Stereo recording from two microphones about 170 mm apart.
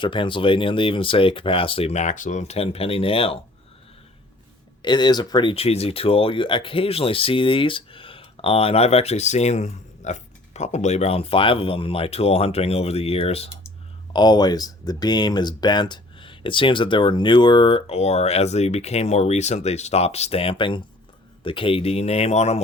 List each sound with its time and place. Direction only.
0.0 s speech: 30° left (ahead or behind)
4.8 s speech: 25° left (ahead or behind)
14.1 s speech: 25° left (ahead or behind)